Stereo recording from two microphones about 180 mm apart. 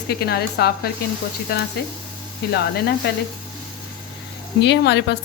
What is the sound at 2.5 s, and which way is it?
Speech, 60° left (ahead or behind).